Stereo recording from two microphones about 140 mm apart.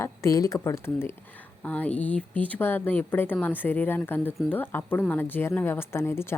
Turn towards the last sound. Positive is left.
turn(degrees=15)  # may be behind; listen again after turning